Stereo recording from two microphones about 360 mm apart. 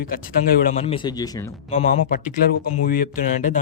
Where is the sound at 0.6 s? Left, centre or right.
Centre.